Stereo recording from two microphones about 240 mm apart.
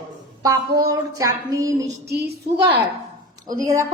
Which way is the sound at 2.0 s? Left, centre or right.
Right.